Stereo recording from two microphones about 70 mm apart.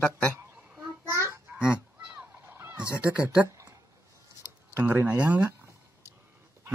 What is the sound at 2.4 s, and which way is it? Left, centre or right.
Neigh, right.